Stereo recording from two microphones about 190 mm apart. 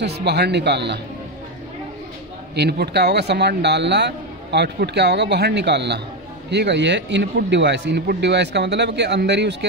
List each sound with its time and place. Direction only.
0.0 s a man's voice: 60° right (ahead or behind)
2.5 s a man's voice: 60° right (ahead or behind)